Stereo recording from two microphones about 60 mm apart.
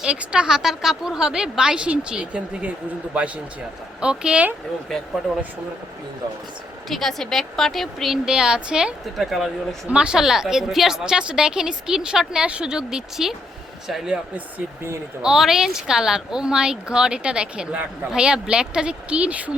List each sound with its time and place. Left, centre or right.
0.0 s speech: centre
4.0 s speech: centre
6.9 s a woman's voice: centre
9.1 s a woman's voice: centre
9.9 s speech: centre
15.2 s speech: centre